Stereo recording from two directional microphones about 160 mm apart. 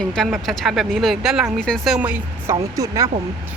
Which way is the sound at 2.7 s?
20° right (ahead or behind).